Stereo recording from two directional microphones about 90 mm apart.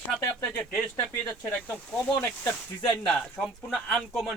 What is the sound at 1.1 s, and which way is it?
Speech, 25° left (ahead or behind).